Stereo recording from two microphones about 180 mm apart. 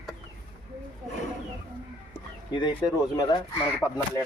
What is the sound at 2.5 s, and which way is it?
Speech, 25° left (ahead or behind).